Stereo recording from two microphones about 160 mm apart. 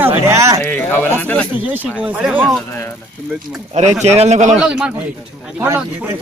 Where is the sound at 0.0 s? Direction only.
15° right (ahead or behind).